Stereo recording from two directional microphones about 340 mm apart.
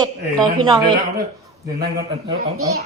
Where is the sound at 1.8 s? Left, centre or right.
Right.